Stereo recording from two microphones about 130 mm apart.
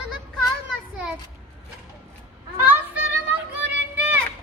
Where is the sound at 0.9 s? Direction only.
10° right (ahead or behind).